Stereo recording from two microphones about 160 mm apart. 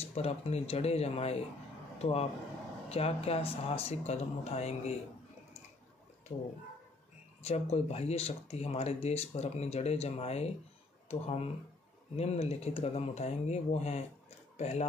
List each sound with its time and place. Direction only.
0.0 s speech: 40° left (ahead or behind)
7.4 s speech: 40° left (ahead or behind)